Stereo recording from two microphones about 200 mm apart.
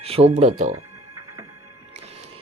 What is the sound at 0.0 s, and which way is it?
Speech, 30° right (ahead or behind).